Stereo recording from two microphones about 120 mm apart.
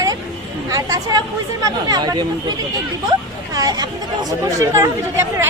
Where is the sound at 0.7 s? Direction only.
30° right (ahead or behind).